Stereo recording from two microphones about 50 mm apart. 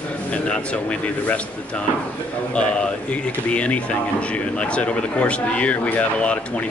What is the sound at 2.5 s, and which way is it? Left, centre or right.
Speech, left.